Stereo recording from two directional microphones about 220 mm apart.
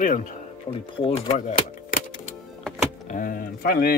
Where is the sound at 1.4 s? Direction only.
35° left (ahead or behind).